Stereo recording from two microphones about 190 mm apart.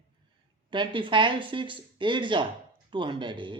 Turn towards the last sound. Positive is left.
turn(degrees=-25)  # may be behind; listen again after turning